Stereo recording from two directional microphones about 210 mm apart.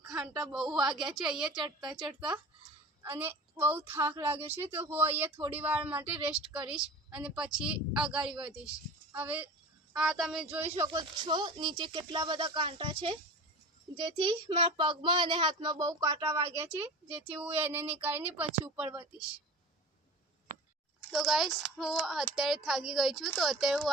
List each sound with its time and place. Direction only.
0.2 s speech: centre (ahead or behind)
1.6 s speech: 20° right (ahead or behind); by 10.6 s centre (ahead or behind)
10.8 s speech: 20° right (ahead or behind)
21.1 s speech: centre (ahead or behind)